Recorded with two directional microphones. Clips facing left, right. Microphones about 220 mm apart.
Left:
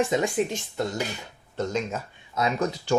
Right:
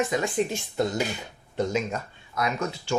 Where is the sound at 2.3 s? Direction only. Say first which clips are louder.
Left 3 dB; 25° left (ahead or behind).